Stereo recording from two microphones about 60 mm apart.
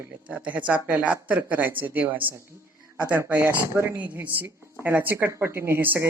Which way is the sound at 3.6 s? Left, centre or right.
Right.